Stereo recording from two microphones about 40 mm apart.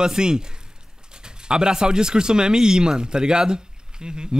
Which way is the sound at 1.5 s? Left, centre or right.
Centre.